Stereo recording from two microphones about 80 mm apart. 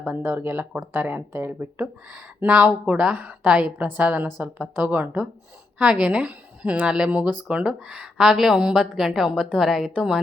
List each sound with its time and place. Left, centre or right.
0.2 s a woman's voice: right; by 10.2 s centre